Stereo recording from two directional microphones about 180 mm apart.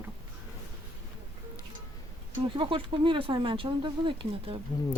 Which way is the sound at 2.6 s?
30° right (ahead or behind).